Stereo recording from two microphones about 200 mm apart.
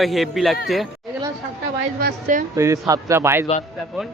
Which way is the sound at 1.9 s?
45° right (ahead or behind).